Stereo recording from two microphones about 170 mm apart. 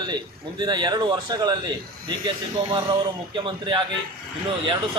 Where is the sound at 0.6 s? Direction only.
25° right (ahead or behind).